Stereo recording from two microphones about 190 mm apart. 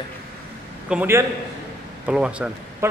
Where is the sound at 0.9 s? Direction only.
10° right (ahead or behind).